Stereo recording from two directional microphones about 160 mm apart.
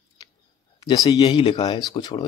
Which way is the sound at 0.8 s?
25° left (ahead or behind).